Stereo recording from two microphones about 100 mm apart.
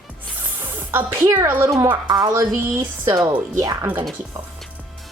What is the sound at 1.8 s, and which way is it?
A woman's voice, 40° right (ahead or behind).